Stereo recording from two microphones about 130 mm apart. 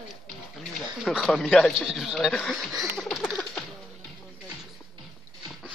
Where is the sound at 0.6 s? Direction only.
5° left (ahead or behind).